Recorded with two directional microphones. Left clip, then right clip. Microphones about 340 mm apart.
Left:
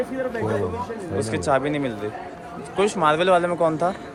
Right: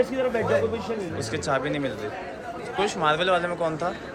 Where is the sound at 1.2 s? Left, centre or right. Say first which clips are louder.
Left 6 dB; centre.